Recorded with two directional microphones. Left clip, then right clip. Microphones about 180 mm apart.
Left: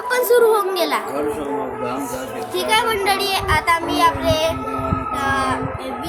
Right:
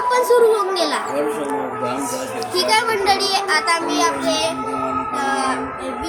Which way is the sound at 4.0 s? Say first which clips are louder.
Left 2 dB; centre (ahead or behind).